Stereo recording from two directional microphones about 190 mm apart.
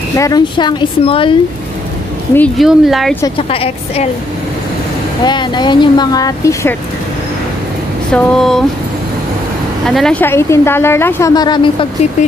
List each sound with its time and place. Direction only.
0.2 s speech: 20° left (ahead or behind)
2.3 s speech: 5° left (ahead or behind)
3.3 s a woman's voice: 30° left (ahead or behind)
5.2 s speech: 25° left (ahead or behind)
8.1 s speech: 5° left (ahead or behind)
9.8 s a woman's voice: 5° left (ahead or behind); by 11.9 s 25° left (ahead or behind)